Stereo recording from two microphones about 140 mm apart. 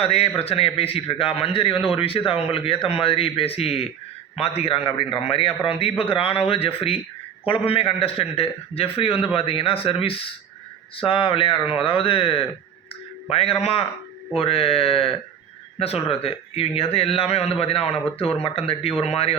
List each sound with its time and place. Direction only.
0.0 s a man's voice: 45° left (ahead or behind)